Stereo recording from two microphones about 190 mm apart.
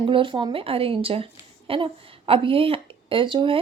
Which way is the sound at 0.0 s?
25° right (ahead or behind).